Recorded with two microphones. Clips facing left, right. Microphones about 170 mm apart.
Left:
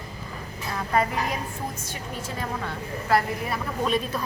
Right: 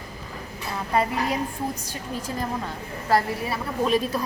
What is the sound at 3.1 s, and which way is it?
Speech, 35° right (ahead or behind).